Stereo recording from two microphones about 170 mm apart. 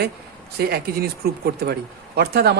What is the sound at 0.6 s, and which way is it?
Speech, 65° right (ahead or behind).